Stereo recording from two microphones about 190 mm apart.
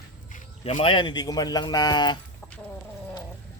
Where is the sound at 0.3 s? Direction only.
40° left (ahead or behind).